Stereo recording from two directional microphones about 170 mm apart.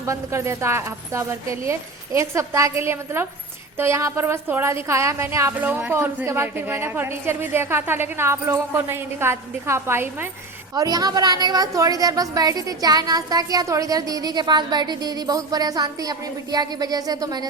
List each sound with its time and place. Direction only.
0.0 s a woman's voice: 15° right (ahead or behind)